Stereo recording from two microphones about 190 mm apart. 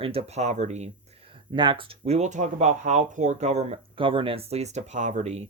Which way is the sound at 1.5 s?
25° right (ahead or behind).